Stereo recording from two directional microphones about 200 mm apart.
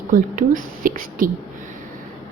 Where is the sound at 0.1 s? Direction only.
45° right (ahead or behind).